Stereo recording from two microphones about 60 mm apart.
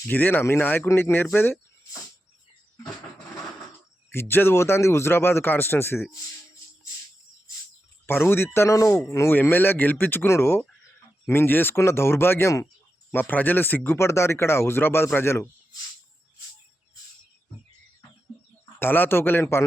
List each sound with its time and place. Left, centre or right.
0.1 s speech: left
0.9 s speech: left
4.1 s speech: left
8.0 s speech: left
9.0 s speech: left
9.3 s speech: left
11.7 s speech: left
18.8 s speech: left